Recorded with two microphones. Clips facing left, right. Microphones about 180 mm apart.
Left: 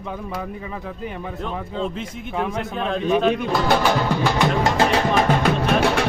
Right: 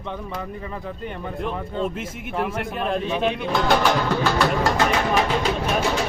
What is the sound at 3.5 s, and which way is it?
Speech, 5° left (ahead or behind).